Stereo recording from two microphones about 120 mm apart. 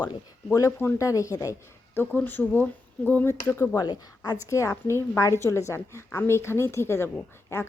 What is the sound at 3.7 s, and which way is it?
Speech, 35° left (ahead or behind).